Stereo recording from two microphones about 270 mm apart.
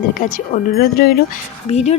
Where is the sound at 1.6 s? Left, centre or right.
Left.